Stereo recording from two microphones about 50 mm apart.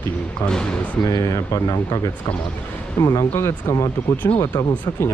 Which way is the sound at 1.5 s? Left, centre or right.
Left.